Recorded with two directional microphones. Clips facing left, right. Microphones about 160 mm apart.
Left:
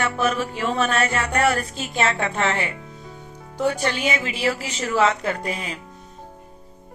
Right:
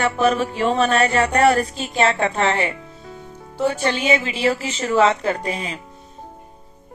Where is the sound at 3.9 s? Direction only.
30° right (ahead or behind).